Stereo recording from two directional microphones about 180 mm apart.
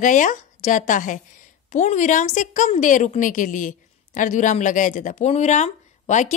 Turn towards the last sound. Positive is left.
turn(degrees=40)  # may be behind; listen again after turning